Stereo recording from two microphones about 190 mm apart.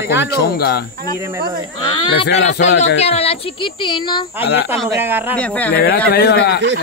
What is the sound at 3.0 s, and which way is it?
A child's voice, 30° left (ahead or behind).